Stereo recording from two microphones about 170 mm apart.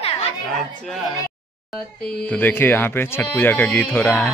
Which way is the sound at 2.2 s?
10° left (ahead or behind).